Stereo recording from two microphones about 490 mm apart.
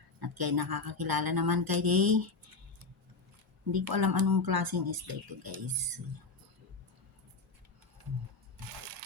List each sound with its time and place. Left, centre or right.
0.2 s speech: right
3.7 s speech: right